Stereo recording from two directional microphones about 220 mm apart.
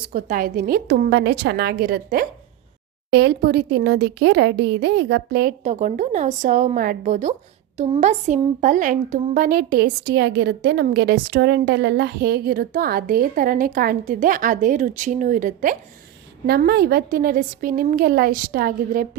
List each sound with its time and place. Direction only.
0.0 s speech: 40° right (ahead or behind)
5.6 s speech: 35° right (ahead or behind)